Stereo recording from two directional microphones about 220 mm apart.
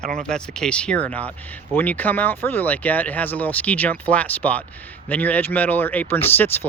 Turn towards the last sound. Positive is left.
turn(degrees=10)  # may be behind; listen again after turning